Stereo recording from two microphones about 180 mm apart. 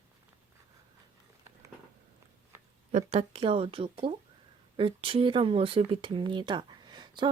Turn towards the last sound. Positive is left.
turn(degrees=-25)  # may be behind; listen again after turning